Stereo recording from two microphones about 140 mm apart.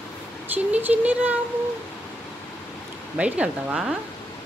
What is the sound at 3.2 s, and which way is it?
Speech, 10° right (ahead or behind).